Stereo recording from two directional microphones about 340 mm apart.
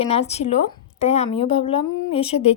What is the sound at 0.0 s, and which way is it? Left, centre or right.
Speech, centre.